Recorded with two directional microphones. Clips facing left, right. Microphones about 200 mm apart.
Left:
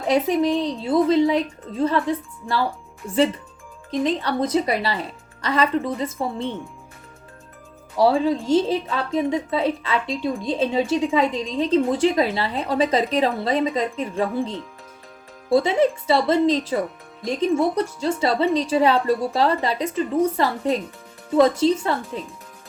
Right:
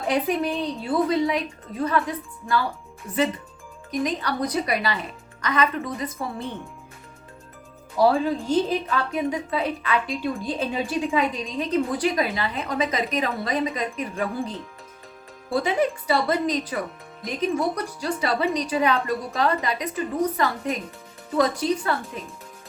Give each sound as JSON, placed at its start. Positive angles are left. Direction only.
{"t": 0.1, "sound": "a woman's voice", "side_deg": 25}
{"t": 9.0, "sound": "a woman's voice", "side_deg": 25}
{"t": 15.5, "sound": "a woman's voice", "side_deg": 25}